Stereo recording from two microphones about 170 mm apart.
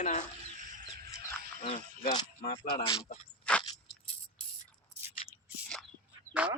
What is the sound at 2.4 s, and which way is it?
Speech, 35° left (ahead or behind).